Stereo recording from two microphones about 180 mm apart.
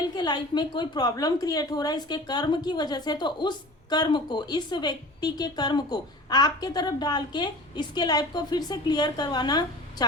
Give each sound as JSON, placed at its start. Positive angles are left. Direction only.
{"t": 0.2, "sound": "a woman's voice", "side_deg": 25}